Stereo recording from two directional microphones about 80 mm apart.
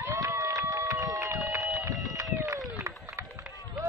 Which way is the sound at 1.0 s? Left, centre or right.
Right.